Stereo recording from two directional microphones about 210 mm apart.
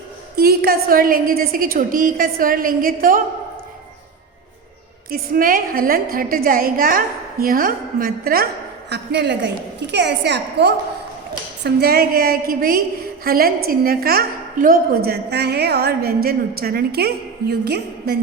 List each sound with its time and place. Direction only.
0.3 s a woman's voice: 45° right (ahead or behind)
5.1 s a woman's voice: 45° right (ahead or behind)